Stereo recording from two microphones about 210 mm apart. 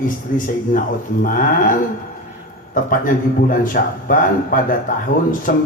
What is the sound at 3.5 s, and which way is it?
A man's voice, 40° left (ahead or behind).